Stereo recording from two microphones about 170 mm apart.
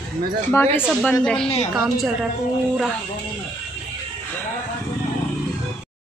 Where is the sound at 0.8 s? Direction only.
5° right (ahead or behind).